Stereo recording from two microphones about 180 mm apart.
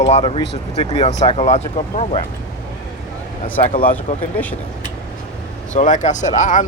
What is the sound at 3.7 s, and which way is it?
Speech, 50° left (ahead or behind).